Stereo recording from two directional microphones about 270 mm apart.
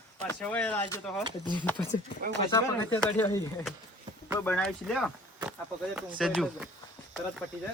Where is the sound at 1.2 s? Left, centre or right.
Centre.